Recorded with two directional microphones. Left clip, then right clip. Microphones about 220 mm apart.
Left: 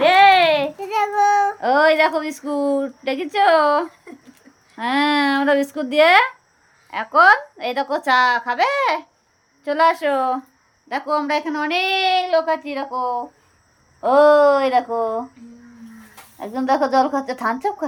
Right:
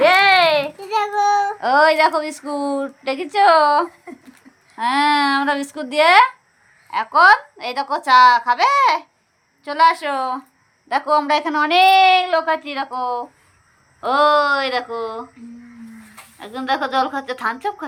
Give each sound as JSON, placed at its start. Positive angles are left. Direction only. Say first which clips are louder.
{"t": 0.0, "sound": "child singing", "louder": "even", "side_deg": 10}
{"t": 1.2, "sound": "a woman's voice", "louder": "left 2 dB", "side_deg": 20}
{"t": 16.4, "sound": "speech", "louder": "left 2 dB", "side_deg": 15}